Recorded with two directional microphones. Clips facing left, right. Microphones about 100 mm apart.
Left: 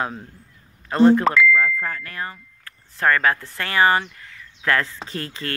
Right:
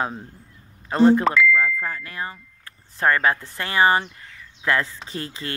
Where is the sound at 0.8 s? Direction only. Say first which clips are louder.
Left 1 dB; 20° right (ahead or behind).